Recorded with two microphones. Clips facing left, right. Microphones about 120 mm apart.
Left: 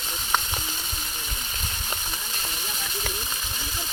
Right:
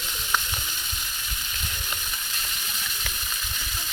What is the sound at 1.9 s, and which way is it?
Frying, 30° left (ahead or behind).